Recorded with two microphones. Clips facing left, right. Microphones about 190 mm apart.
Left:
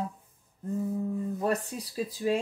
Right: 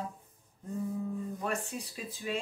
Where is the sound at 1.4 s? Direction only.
35° left (ahead or behind).